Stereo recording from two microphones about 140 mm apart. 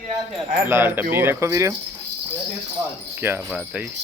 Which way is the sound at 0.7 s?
15° right (ahead or behind).